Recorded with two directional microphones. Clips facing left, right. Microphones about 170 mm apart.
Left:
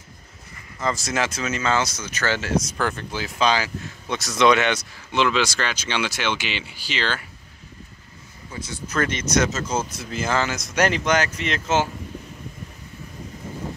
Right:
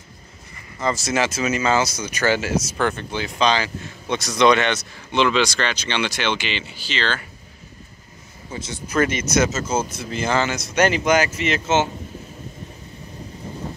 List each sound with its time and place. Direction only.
0.7 s speech: centre (ahead or behind)
8.5 s speech: 25° right (ahead or behind)
8.8 s speech: 10° right (ahead or behind)